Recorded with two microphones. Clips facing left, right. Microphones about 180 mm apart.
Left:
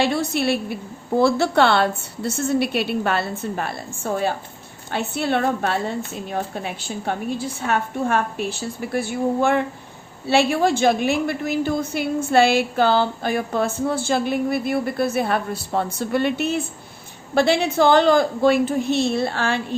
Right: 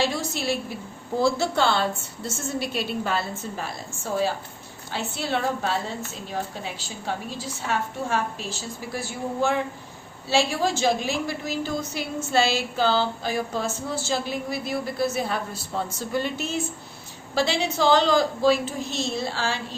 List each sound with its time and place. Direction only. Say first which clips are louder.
0.0 s a woman's voice: left 5 dB; 60° left (ahead or behind)